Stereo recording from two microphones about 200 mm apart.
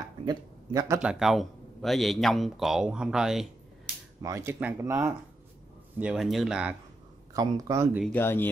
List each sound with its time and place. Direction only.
0.0 s speech: 20° right (ahead or behind)
1.2 s speech: centre (ahead or behind)
4.2 s speech: 15° right (ahead or behind)
7.3 s speech: 15° right (ahead or behind)
8.0 s speech: 10° left (ahead or behind)